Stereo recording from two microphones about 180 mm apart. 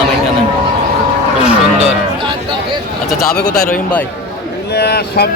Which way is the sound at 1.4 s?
5° right (ahead or behind).